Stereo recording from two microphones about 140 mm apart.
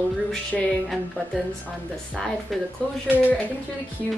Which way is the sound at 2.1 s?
Centre (ahead or behind).